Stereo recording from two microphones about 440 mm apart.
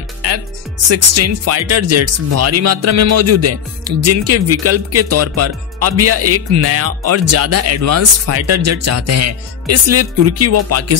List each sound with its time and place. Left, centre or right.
0.8 s speech: right